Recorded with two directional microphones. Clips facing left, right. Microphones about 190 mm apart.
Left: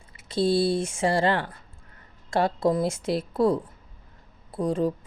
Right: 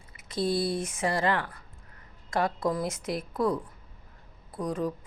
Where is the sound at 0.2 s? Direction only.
30° left (ahead or behind).